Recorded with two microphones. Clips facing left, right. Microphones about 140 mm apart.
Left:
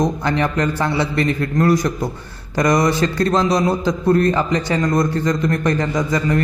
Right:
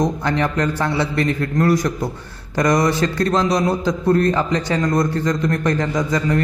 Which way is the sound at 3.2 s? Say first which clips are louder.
Left 2 dB; 30° left (ahead or behind).